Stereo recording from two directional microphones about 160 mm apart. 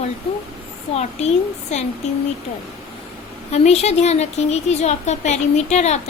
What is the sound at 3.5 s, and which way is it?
A woman's voice, 45° left (ahead or behind).